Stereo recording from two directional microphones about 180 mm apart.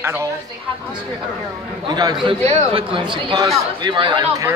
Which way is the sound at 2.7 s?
30° right (ahead or behind).